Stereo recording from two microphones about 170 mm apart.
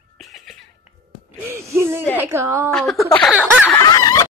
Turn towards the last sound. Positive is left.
turn(degrees=20)  # may be behind; listen again after turning